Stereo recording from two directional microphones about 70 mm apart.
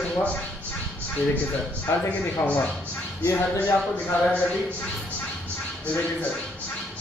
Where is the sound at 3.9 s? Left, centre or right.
Centre.